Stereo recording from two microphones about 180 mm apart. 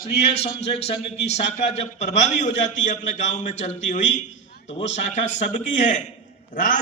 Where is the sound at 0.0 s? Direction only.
65° left (ahead or behind).